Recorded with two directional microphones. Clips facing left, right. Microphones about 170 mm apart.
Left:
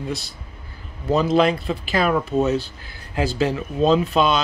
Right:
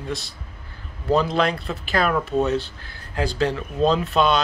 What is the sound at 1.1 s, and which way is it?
Speech, centre (ahead or behind).